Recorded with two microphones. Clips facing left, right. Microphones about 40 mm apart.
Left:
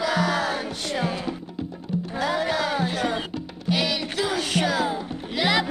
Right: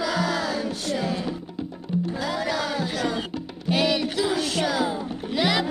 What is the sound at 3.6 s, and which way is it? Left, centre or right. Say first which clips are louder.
Music: right 2 dB; right.